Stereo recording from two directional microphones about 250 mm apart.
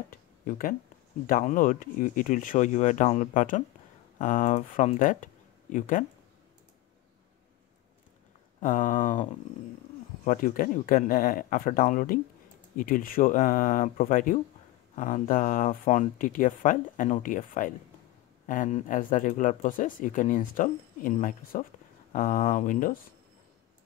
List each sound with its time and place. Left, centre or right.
0.1 s a sound: left
1.2 s speech: left
8.5 s speech: left